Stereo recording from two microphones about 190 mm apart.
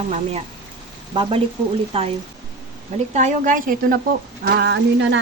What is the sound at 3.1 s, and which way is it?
Speech, 40° right (ahead or behind).